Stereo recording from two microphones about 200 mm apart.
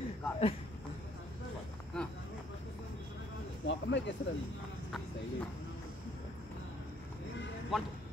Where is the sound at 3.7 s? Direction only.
60° left (ahead or behind).